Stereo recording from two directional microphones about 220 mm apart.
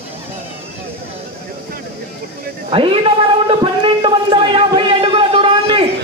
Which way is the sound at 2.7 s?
25° right (ahead or behind).